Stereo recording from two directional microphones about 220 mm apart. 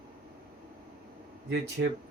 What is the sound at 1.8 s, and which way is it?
Speech, 55° right (ahead or behind).